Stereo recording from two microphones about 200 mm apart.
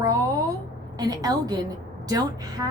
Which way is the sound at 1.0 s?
20° right (ahead or behind).